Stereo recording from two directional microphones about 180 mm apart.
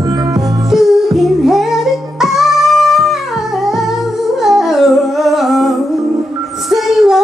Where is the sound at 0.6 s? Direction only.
Centre (ahead or behind).